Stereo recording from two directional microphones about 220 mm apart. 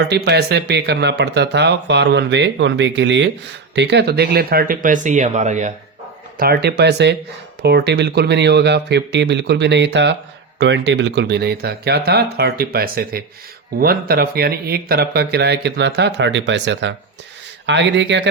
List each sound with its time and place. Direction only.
0.0 s speech: 50° right (ahead or behind); by 5.7 s 35° right (ahead or behind)
6.3 s speech: 45° right (ahead or behind)